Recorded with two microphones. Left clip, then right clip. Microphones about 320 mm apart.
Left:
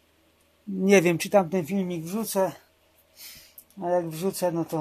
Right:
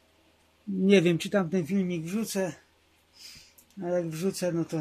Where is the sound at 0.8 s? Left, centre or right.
Left.